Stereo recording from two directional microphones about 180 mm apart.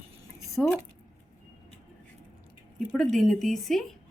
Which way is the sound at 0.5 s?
Centre (ahead or behind).